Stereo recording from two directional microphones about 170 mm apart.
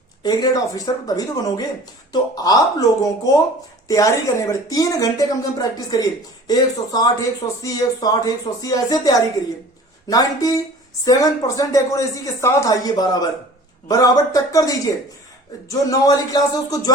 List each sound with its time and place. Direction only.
0.2 s speech: 25° left (ahead or behind)